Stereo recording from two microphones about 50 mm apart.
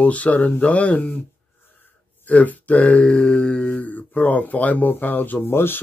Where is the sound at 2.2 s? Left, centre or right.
Left.